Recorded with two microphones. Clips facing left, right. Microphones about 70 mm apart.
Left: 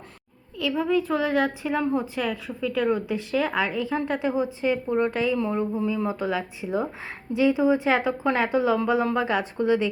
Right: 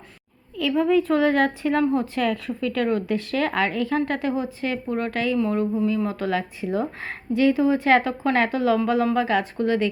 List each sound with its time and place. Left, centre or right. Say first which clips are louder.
0.5 s a woman's voice: right 4 dB; centre